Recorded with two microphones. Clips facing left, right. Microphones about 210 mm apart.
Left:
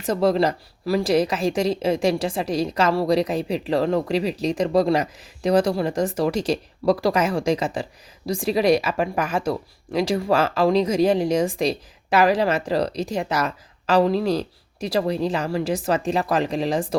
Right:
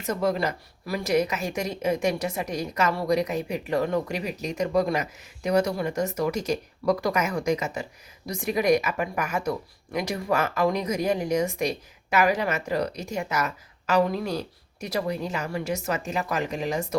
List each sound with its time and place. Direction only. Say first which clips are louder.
0.0 s a woman's voice: left 6 dB; 30° left (ahead or behind)